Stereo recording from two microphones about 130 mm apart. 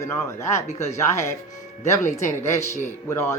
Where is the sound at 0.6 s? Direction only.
60° left (ahead or behind).